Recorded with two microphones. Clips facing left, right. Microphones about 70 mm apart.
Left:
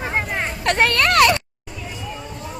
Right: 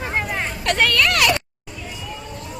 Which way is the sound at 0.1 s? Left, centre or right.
Left.